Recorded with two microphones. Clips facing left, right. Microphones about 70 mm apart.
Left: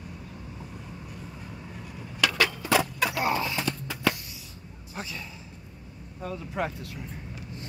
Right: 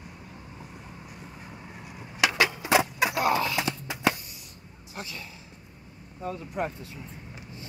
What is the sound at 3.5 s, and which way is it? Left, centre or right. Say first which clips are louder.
Music: right 1 dB; centre.